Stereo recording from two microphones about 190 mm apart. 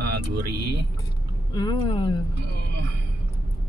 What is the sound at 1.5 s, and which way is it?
Speech, 20° left (ahead or behind).